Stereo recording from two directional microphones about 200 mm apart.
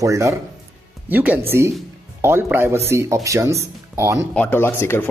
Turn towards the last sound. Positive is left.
turn(degrees=10)  # may be behind; listen again after turning